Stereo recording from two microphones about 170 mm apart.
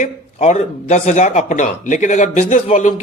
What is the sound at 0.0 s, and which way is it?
Speech, 45° left (ahead or behind).